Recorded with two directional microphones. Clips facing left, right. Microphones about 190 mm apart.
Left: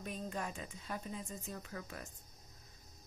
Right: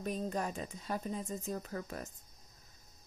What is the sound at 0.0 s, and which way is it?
A woman's voice, 40° right (ahead or behind).